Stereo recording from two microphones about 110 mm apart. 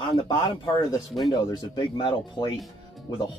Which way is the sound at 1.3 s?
40° left (ahead or behind).